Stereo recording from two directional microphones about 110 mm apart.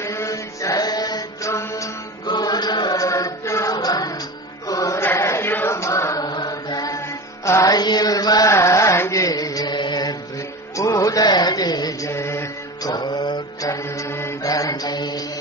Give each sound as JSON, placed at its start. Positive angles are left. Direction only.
{"t": 0.0, "sound": "music", "side_deg": 25}
{"t": 5.0, "sound": "chant", "side_deg": 25}
{"t": 10.8, "sound": "mantra", "side_deg": 30}
{"t": 13.3, "sound": "mantra", "side_deg": 30}